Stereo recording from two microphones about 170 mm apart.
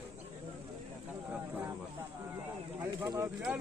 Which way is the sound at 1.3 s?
10° right (ahead or behind).